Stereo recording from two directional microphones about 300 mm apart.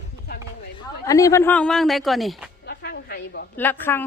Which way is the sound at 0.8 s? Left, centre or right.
Centre.